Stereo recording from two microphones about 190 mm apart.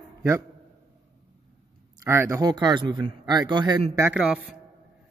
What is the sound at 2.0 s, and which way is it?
A man's voice, 15° right (ahead or behind).